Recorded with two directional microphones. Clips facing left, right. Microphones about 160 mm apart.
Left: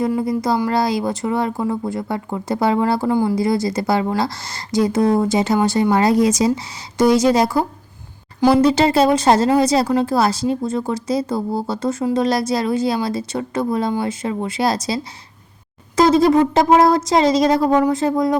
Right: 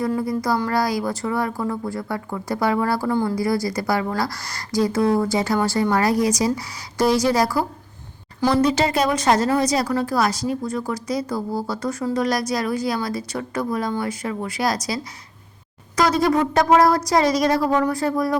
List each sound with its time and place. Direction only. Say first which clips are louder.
0.2 s speech: left 3 dB; 20° left (ahead or behind)